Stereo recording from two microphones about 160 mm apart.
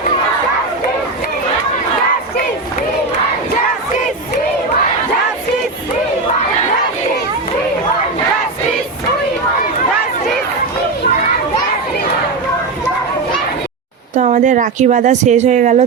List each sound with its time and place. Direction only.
14.2 s speech: 50° right (ahead or behind)